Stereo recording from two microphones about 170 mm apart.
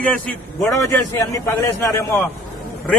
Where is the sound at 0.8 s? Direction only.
20° left (ahead or behind).